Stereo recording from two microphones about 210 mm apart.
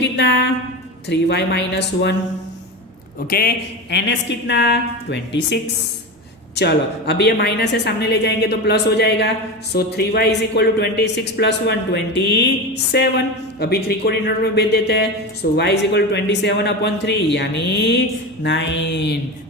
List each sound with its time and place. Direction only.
0.0 s mantra: 55° left (ahead or behind)
1.0 s speech: 55° left (ahead or behind)
3.2 s speech: 45° left (ahead or behind)
6.6 s speech: 55° left (ahead or behind)
18.4 s mantra: 55° left (ahead or behind)